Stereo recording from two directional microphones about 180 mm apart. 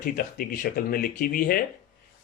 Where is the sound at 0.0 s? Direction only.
55° left (ahead or behind).